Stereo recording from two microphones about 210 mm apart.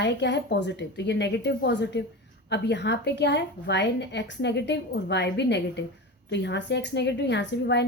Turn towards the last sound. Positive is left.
turn(degrees=55)  # may be behind; listen again after turning